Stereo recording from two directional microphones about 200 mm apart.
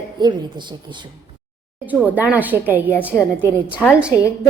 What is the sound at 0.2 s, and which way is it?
Speech, 20° right (ahead or behind).